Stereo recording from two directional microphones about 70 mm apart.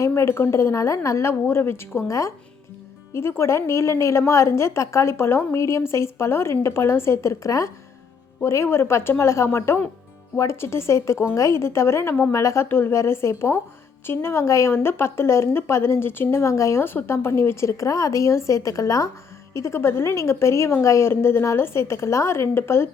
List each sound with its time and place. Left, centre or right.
0.1 s speech: left
2.0 s speech: left
3.1 s speech: left
12.6 s speech: left
16.4 s speech: left
16.8 s speech: left
19.5 s speech: left
21.1 s speech: left